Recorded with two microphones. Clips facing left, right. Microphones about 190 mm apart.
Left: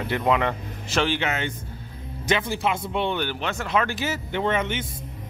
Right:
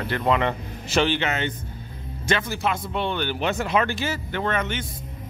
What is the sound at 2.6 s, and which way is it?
Speech, 15° left (ahead or behind).